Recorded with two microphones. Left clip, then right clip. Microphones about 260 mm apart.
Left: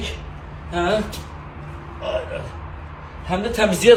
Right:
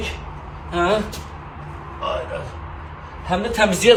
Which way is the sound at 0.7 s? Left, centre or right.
Right.